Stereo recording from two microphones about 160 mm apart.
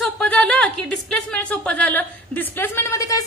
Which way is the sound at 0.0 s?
10° left (ahead or behind).